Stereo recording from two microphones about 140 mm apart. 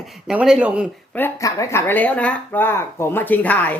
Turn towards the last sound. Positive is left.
turn(degrees=10)  # may be behind; listen again after turning